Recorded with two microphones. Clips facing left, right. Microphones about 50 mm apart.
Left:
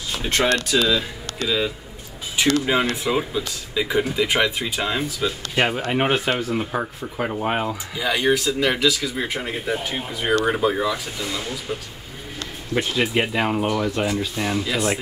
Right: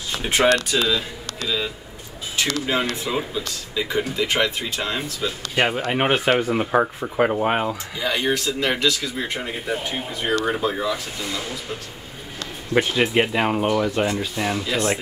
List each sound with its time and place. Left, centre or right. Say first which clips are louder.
0.2 s speech: right 1 dB; centre
0.7 s speech: left 2 dB; centre
2.6 s speech: left 2 dB; centre
5.6 s speech: even; centre
6.1 s speech: right 3 dB; right
8.0 s speech: left 3 dB; centre
13.0 s speech: right 2 dB; centre